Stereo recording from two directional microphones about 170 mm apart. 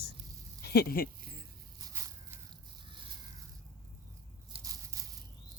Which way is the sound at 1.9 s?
15° right (ahead or behind).